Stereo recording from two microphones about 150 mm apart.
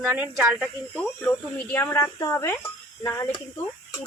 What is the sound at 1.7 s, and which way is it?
Speech, 15° left (ahead or behind).